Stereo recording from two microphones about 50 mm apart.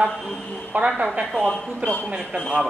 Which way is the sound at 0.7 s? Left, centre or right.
Centre.